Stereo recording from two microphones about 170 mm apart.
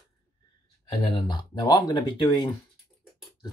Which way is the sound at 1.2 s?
25° left (ahead or behind).